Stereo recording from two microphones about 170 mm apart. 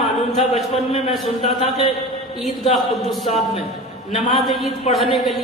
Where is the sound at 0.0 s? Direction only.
Centre (ahead or behind).